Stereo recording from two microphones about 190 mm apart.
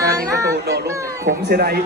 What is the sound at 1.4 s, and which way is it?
Speech, 55° right (ahead or behind).